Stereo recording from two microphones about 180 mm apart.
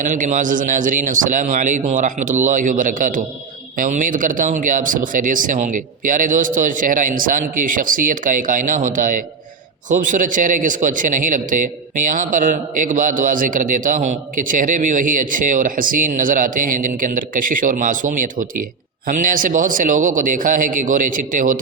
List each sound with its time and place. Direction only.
0.0 s a man's voice: 45° right (ahead or behind)